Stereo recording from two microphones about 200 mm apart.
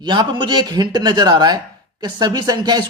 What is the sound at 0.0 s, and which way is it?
Speech, 25° right (ahead or behind).